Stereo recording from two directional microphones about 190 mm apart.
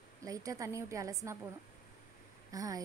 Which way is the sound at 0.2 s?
15° right (ahead or behind).